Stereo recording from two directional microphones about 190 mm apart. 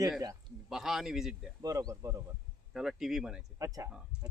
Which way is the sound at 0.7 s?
Centre (ahead or behind).